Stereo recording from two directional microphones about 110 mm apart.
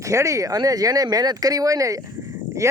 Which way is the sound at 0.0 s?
30° right (ahead or behind).